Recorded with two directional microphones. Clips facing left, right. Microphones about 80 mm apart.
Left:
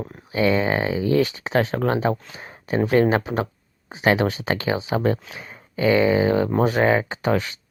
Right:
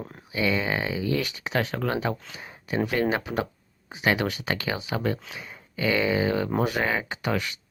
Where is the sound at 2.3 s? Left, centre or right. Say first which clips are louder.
Left 6 dB; left.